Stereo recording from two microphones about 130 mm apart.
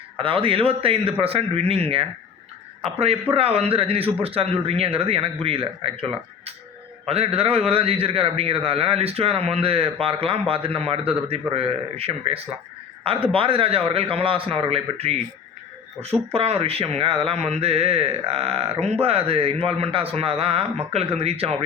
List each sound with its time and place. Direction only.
0.2 s a man's voice: 40° right (ahead or behind)
3.3 s a man's voice: 50° right (ahead or behind)